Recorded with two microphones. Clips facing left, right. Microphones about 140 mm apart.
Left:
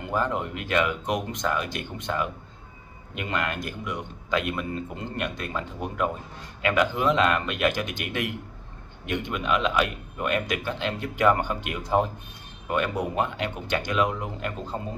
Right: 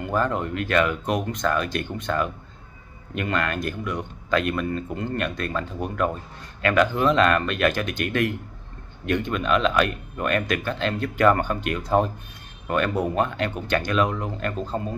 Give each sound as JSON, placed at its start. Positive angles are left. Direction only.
{"t": 0.0, "sound": "speech", "side_deg": 20}